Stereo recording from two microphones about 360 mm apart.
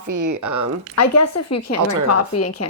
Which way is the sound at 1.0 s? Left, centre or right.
Left.